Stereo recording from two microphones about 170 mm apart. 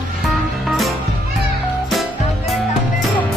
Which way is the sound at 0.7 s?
Centre (ahead or behind).